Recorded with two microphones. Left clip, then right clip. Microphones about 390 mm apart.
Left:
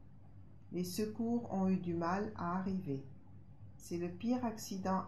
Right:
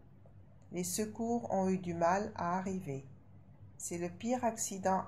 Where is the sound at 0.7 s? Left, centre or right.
Right.